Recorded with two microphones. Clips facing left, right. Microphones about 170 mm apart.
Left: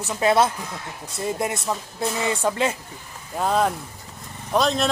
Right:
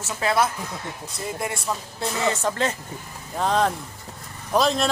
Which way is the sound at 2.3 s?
10° left (ahead or behind).